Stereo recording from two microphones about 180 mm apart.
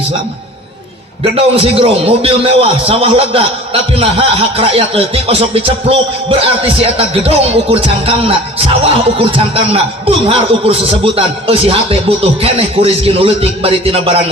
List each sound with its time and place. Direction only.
1.2 s speech: 30° right (ahead or behind)